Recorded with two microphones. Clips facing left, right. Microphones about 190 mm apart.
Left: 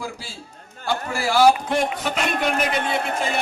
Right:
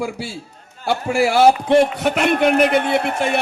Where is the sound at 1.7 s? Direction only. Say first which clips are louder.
Right 8 dB; 65° right (ahead or behind).